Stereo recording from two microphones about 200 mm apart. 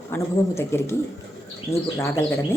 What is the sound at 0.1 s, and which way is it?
A woman's voice, 10° left (ahead or behind).